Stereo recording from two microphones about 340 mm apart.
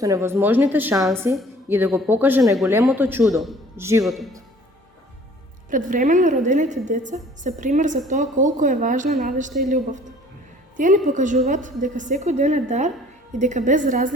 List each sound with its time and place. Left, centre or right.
0.0 s a woman's voice: centre
5.7 s a woman's voice: right